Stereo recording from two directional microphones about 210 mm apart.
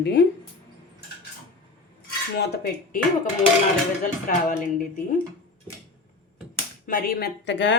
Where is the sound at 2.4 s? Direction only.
50° left (ahead or behind).